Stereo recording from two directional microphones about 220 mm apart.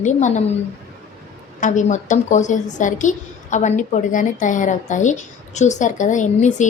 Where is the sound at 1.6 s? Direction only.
35° left (ahead or behind).